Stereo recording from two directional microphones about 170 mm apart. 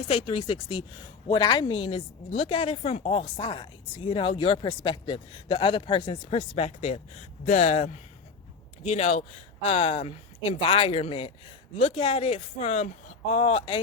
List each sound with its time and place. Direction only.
0.1 s a woman's voice: 30° left (ahead or behind)